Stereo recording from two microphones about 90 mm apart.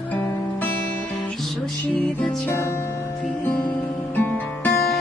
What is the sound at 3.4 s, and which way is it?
Music, 20° left (ahead or behind).